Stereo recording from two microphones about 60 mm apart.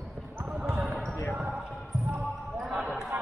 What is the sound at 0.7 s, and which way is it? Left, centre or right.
Basketball bounce, centre.